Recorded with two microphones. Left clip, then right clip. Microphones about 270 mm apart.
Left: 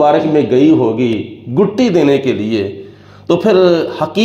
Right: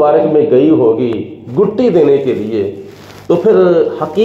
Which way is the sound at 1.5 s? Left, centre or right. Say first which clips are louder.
Right 2 dB; left.